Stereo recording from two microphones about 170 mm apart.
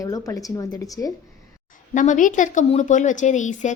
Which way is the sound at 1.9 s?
50° left (ahead or behind).